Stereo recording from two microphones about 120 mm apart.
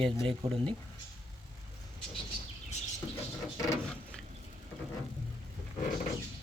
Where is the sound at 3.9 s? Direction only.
5° left (ahead or behind).